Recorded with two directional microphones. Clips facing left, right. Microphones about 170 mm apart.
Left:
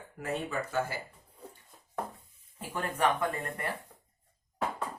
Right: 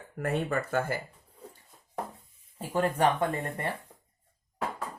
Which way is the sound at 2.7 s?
30° right (ahead or behind).